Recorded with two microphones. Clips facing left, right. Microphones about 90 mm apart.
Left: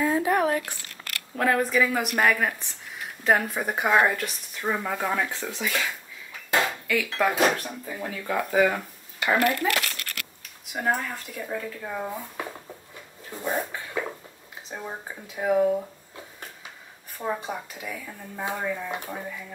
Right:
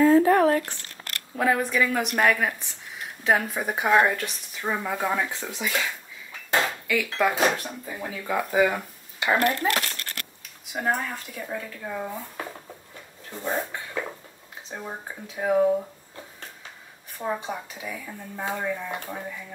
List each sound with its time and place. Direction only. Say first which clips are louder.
0.0 s a sound: right 6 dB; 15° left (ahead or behind)
1.3 s speech: left 1 dB; 5° right (ahead or behind)
5.3 s speech: even; 15° right (ahead or behind)
6.9 s speech: right 2 dB; centre (ahead or behind)
9.2 s speech: even; 20° right (ahead or behind)
9.5 s crumpling: even; 35° right (ahead or behind)
10.7 s speech: even; centre (ahead or behind)
13.3 s speech: even; 10° left (ahead or behind)
13.7 s a sound: left 1 dB; centre (ahead or behind)
14.7 s speech: even; centre (ahead or behind)
17.2 s speech: even; centre (ahead or behind)